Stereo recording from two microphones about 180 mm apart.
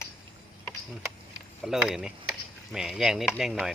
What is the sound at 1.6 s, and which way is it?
Speech, 5° right (ahead or behind).